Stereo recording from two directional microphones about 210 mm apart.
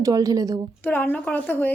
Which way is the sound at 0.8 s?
10° left (ahead or behind).